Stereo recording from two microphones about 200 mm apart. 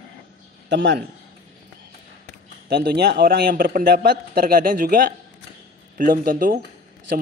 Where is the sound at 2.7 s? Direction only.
55° right (ahead or behind).